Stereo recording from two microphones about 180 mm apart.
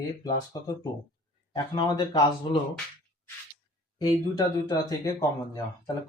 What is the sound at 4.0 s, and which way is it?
Speech, 20° left (ahead or behind).